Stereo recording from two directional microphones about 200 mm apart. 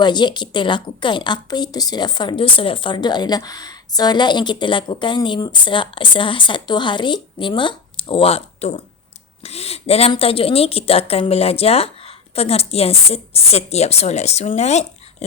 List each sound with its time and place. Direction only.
0.0 s a woman's voice: 20° left (ahead or behind)